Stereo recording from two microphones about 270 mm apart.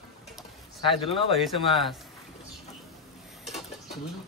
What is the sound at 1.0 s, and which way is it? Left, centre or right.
Speech, centre.